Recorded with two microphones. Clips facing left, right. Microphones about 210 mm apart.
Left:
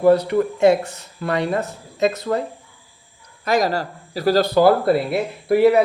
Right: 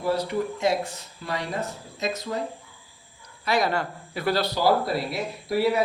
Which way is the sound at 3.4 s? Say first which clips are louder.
Left 5 dB; 40° left (ahead or behind).